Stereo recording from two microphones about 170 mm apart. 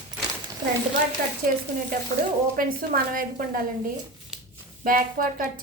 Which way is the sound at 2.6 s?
55° right (ahead or behind).